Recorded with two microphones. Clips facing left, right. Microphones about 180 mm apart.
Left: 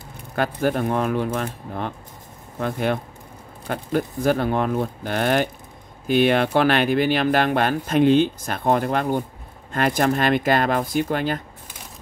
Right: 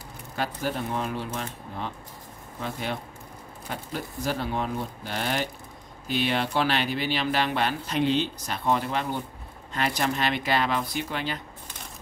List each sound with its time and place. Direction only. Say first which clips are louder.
0.4 s speech: left 8 dB; 55° left (ahead or behind)